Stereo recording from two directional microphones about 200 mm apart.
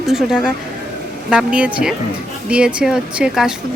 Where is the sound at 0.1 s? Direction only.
Centre (ahead or behind).